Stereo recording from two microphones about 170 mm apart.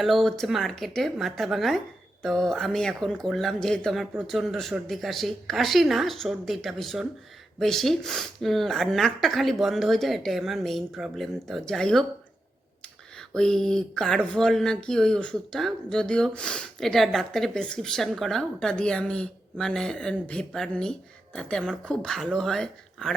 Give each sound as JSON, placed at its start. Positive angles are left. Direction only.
{"t": 0.0, "sound": "speech", "side_deg": 0}